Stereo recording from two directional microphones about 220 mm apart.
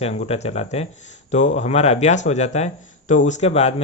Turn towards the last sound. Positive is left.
turn(degrees=30)  # may be behind; listen again after turning